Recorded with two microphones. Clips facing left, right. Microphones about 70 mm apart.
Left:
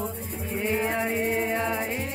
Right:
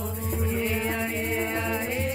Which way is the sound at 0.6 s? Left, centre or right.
Left.